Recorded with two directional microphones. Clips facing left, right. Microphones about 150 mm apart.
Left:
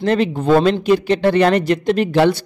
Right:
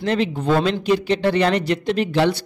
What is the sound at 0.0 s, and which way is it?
Speech, 50° left (ahead or behind).